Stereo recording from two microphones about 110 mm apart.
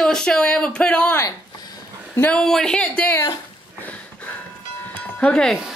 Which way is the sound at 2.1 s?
10° left (ahead or behind).